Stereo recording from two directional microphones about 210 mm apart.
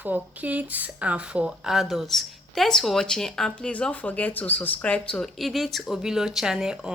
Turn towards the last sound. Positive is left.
turn(degrees=-5)  # may be behind; listen again after turning